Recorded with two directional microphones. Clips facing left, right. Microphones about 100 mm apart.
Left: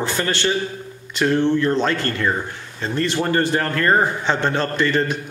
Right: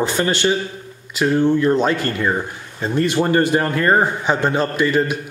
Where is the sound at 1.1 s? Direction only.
5° right (ahead or behind).